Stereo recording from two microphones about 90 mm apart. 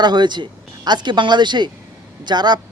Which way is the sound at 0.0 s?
55° right (ahead or behind).